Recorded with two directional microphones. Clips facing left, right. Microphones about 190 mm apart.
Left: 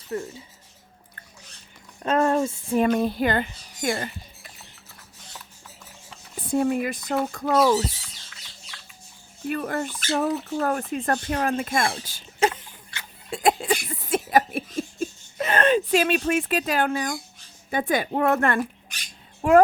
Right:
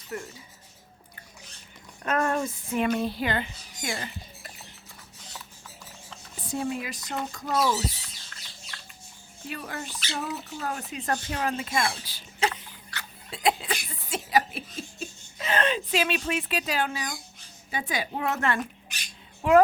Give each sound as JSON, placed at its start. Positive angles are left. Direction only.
{"t": 0.1, "sound": "speech", "side_deg": 25}
{"t": 2.0, "sound": "speech", "side_deg": 30}
{"t": 2.7, "sound": "a sound", "side_deg": 40}
{"t": 3.0, "sound": "speech", "side_deg": 50}
{"t": 6.5, "sound": "speech", "side_deg": 55}
{"t": 8.7, "sound": "bird", "side_deg": 0}
{"t": 9.5, "sound": "a child's voice", "side_deg": 50}